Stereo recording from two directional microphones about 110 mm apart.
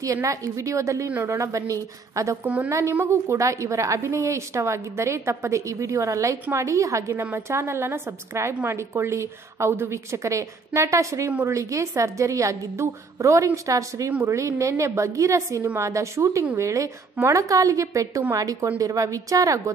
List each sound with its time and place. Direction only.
0.0 s a woman's voice: 30° right (ahead or behind)
2.4 s a woman's voice: 15° right (ahead or behind)
2.7 s a woman's voice: 25° right (ahead or behind)